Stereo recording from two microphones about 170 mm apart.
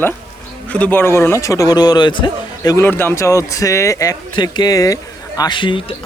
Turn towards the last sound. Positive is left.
turn(degrees=30)  # may be behind; listen again after turning